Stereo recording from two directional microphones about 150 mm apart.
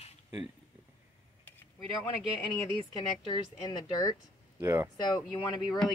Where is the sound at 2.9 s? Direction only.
30° left (ahead or behind).